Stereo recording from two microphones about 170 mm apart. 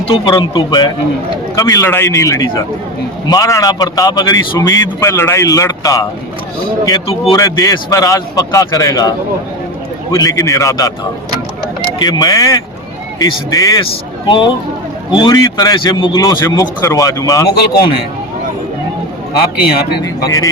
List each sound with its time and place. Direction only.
0.0 s a man's voice: 30° left (ahead or behind)
7.3 s a man's voice: 20° left (ahead or behind)
11.9 s a man's voice: 25° left (ahead or behind)
17.5 s a man's voice: 65° left (ahead or behind)
19.3 s a man's voice: 65° left (ahead or behind)
20.2 s a man's voice: 20° left (ahead or behind)